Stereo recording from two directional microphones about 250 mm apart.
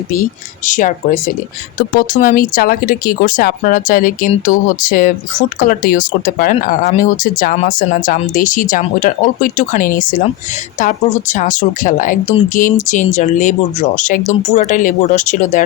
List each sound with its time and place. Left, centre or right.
0.1 s speech: left